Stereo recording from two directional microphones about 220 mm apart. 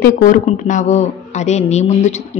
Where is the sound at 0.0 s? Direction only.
35° left (ahead or behind).